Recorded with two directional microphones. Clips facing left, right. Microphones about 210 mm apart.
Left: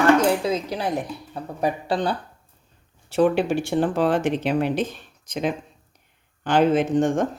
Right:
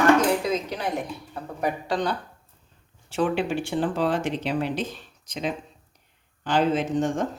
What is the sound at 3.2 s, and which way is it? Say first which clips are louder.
Speech: left 5 dB; 45° left (ahead or behind).